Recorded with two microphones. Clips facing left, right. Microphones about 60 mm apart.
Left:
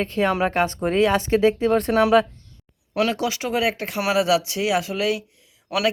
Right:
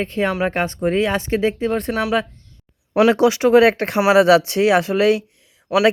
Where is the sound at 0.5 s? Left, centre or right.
Right.